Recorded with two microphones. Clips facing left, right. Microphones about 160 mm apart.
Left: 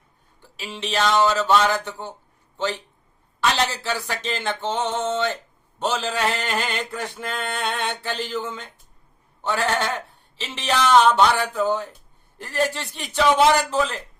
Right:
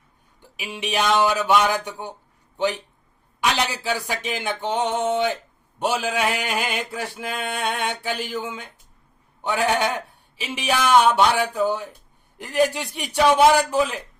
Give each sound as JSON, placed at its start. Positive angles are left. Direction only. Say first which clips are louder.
{"t": 0.4, "sound": "male singing", "louder": "right 1 dB", "side_deg": -15}